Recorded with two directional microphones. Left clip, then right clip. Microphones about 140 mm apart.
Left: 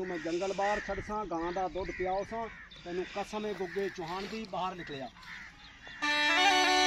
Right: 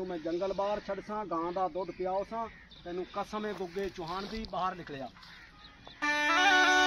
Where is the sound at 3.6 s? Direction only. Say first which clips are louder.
Left 1 dB; 25° right (ahead or behind).